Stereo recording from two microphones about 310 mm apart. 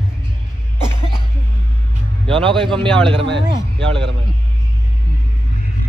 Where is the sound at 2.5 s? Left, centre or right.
Centre.